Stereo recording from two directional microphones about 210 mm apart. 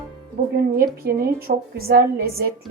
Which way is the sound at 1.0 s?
45° right (ahead or behind).